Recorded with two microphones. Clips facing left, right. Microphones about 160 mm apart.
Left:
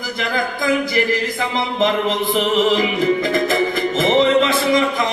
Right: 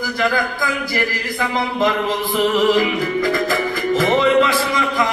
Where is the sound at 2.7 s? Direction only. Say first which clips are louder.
Even; 25° left (ahead or behind).